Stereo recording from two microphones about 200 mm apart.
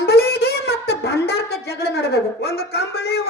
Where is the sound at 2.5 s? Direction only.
55° left (ahead or behind).